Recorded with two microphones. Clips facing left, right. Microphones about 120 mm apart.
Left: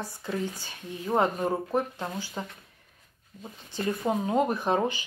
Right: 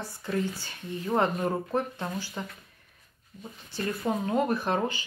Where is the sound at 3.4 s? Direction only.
15° left (ahead or behind).